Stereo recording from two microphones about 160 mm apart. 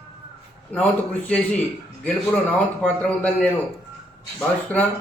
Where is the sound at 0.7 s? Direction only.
10° left (ahead or behind).